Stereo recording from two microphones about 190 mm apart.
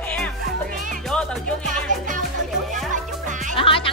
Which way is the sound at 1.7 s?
45° right (ahead or behind).